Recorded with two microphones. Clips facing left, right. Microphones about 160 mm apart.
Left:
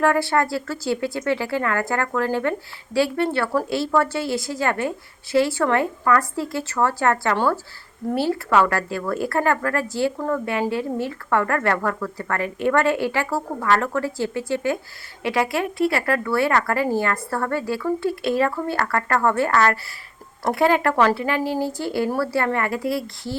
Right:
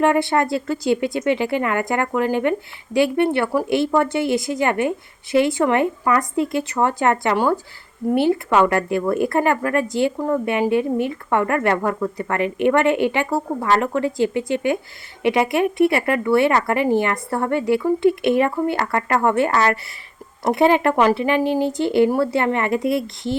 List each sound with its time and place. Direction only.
0.0 s a woman's voice: 20° right (ahead or behind)